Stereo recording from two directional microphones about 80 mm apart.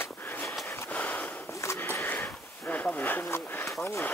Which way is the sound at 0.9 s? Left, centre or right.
Centre.